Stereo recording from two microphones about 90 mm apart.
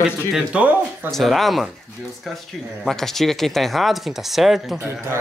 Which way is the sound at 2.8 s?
5° left (ahead or behind).